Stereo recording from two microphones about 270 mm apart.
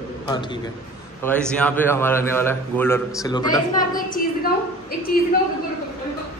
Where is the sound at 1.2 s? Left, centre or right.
Centre.